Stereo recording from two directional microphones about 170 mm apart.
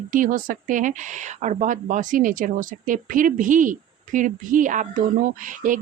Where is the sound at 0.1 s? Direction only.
50° right (ahead or behind).